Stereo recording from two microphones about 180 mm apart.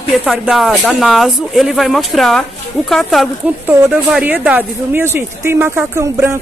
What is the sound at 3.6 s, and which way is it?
Speech, 10° right (ahead or behind).